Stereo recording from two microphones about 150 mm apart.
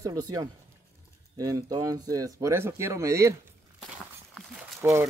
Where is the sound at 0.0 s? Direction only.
25° right (ahead or behind).